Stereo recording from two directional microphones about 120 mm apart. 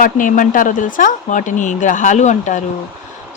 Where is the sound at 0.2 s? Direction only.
90° left.